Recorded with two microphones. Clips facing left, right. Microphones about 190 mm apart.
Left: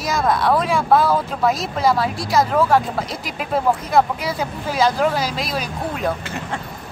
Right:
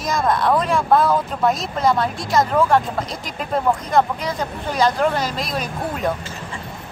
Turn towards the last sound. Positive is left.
turn(degrees=65)  # may be behind; listen again after turning